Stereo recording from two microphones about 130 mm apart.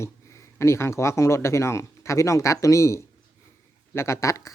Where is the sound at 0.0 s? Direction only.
20° left (ahead or behind).